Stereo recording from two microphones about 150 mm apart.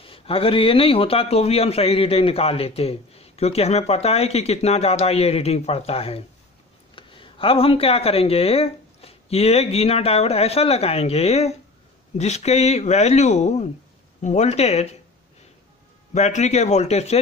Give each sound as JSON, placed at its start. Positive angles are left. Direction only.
{"t": 0.0, "sound": "a man's voice", "side_deg": 40}
{"t": 16.1, "sound": "a man's voice", "side_deg": 50}